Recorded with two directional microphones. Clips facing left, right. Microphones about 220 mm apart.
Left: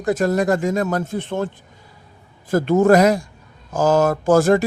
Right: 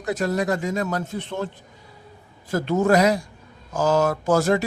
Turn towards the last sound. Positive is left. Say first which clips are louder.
# left 5 dB
turn(degrees=50)  # may be behind; listen again after turning